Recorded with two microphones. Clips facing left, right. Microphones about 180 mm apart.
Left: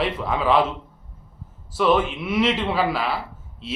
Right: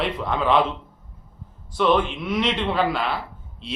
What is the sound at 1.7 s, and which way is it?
A man's voice, 5° left (ahead or behind).